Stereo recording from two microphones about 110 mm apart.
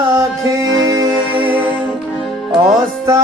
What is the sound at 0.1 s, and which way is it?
Music, 35° right (ahead or behind).